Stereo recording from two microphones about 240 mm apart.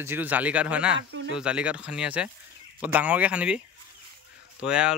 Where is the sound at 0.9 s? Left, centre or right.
Right.